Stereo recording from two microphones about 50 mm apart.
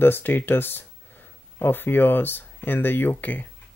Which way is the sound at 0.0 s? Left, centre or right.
Left.